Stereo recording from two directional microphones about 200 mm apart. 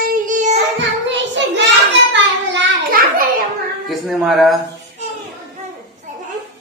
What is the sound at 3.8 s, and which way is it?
Speech, centre (ahead or behind).